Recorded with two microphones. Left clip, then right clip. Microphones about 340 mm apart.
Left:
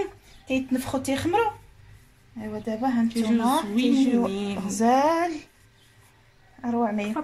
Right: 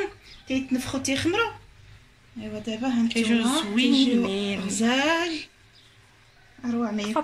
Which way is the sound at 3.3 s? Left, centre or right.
Centre.